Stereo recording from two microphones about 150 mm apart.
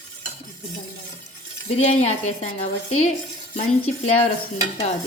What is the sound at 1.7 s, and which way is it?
Speech, 45° left (ahead or behind).